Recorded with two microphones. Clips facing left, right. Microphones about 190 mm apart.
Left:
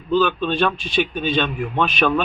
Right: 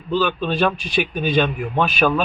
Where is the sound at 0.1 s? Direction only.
5° right (ahead or behind).